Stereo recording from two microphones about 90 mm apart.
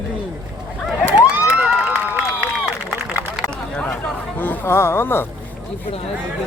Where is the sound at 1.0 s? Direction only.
15° right (ahead or behind).